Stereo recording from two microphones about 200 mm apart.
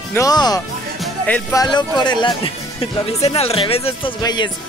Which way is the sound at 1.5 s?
20° left (ahead or behind).